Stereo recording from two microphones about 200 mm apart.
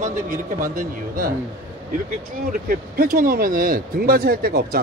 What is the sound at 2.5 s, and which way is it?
Speech, 45° right (ahead or behind).